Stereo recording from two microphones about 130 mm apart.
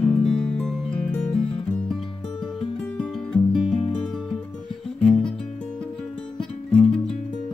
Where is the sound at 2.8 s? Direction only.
5° left (ahead or behind).